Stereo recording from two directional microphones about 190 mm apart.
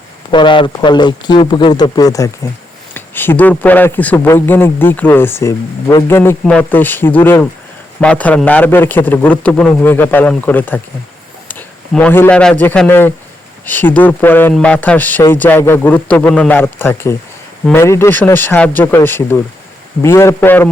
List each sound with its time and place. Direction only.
0.3 s speech: 25° left (ahead or behind); by 10.8 s 10° left (ahead or behind)
11.9 s speech: 10° left (ahead or behind)